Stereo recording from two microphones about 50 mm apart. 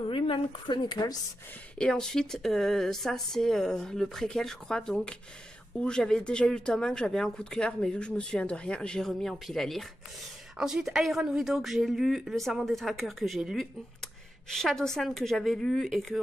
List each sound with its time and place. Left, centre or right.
1.8 s speech: centre
9.0 s speech: centre
10.6 s speech: centre
13.6 s speech: centre